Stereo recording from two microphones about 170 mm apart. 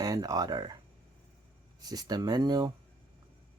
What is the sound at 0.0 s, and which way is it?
Speech, 20° right (ahead or behind).